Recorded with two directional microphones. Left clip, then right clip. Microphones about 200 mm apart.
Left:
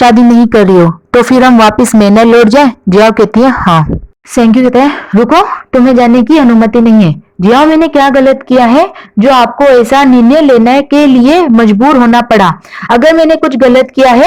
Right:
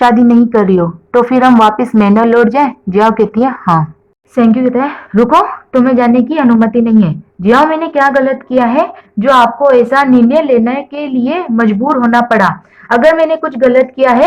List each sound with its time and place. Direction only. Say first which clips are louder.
0.0 s speech: left 3 dB; 30° left (ahead or behind); by 14.2 s 50° left (ahead or behind)